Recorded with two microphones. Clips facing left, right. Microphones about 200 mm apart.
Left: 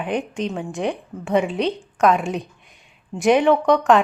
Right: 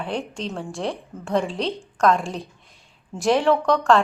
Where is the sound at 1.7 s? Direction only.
5° left (ahead or behind).